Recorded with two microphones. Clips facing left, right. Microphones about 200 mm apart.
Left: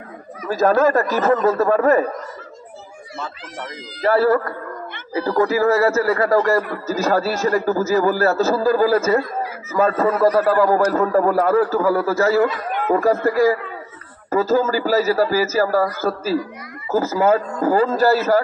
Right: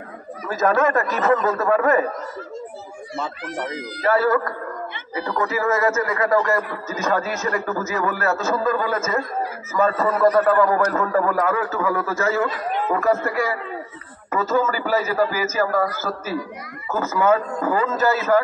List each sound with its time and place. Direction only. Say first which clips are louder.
0.5 s a man's voice: left 4 dB; 30° left (ahead or behind)
4.1 s a man's voice: left 3 dB; 30° left (ahead or behind)
16.9 s a man's voice: left 3 dB; 35° left (ahead or behind)